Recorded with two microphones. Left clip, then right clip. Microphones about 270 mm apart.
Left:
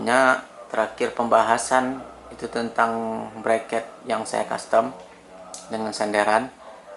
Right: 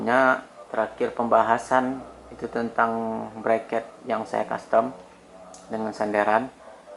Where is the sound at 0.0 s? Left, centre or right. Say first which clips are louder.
Left 2 dB; centre.